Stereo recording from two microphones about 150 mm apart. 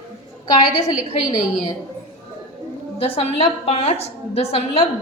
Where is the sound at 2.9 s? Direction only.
40° left (ahead or behind).